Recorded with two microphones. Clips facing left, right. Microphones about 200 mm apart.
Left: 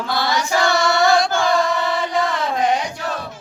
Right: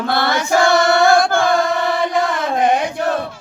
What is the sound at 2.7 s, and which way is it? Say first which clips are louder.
Chant: right 5 dB; 55° right (ahead or behind).